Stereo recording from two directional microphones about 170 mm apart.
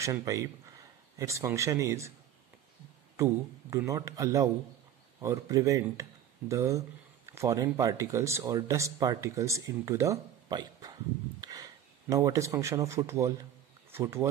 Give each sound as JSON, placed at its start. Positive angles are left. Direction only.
{"t": 0.0, "sound": "speech", "side_deg": -20}
{"t": 3.2, "sound": "speech", "side_deg": -15}